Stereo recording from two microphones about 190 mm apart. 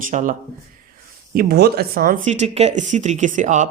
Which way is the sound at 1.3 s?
55° right (ahead or behind).